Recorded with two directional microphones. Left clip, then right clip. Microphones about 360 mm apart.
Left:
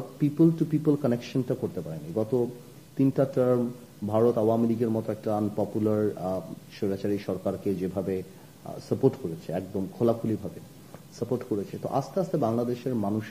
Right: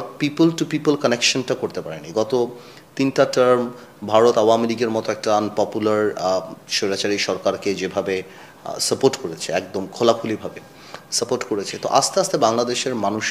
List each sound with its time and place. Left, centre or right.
0.6 s speech: centre
3.0 s speech: centre
4.6 s speech: centre